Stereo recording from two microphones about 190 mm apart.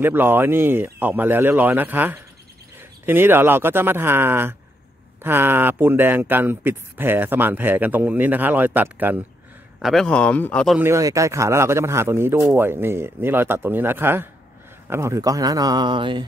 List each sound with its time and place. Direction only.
0.0 s a man's voice: 10° right (ahead or behind); by 10.8 s 5° left (ahead or behind)
10.8 s speech: 15° right (ahead or behind)